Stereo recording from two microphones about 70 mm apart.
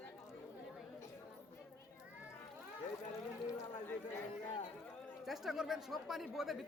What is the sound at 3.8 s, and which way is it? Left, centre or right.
Chatter, left.